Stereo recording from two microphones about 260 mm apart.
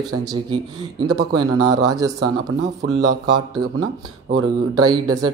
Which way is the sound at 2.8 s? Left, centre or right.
Right.